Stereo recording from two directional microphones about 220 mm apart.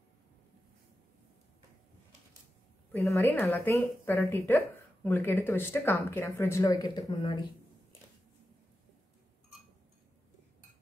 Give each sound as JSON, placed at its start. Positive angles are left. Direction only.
{"t": 2.9, "sound": "a woman's voice", "side_deg": 0}
{"t": 7.1, "sound": "speech", "side_deg": 25}